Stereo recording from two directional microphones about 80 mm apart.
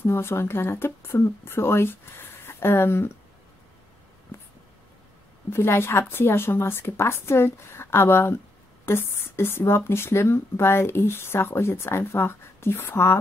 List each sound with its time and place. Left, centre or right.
0.0 s speech: left
4.3 s a sound: left
5.5 s speech: left